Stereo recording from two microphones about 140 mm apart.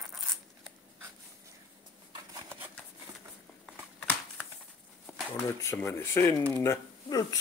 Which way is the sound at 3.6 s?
10° left (ahead or behind).